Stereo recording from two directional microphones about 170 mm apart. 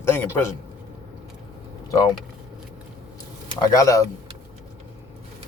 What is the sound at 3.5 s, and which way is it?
Speech, 20° left (ahead or behind).